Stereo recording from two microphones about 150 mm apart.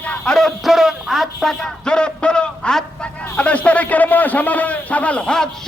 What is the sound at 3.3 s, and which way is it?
A man's voice, 10° left (ahead or behind).